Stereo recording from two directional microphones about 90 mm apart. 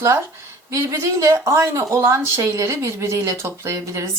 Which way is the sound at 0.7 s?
35° right (ahead or behind).